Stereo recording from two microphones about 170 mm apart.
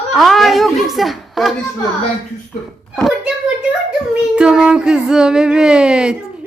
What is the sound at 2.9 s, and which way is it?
A child's voice, centre (ahead or behind).